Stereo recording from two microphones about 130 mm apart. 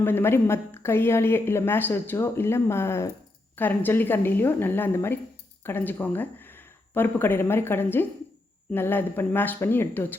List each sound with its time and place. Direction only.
0.0 s a woman's voice: 15° left (ahead or behind)